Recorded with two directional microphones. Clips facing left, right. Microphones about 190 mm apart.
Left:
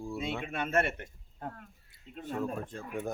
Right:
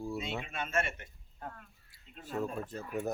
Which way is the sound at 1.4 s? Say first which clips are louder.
Left 4 dB; 45° left (ahead or behind).